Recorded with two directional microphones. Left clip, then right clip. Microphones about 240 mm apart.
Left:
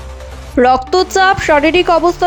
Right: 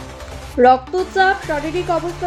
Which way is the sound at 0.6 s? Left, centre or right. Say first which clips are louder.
Left 3 dB; left.